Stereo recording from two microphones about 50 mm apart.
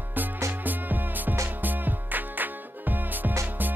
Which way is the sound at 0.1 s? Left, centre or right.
Right.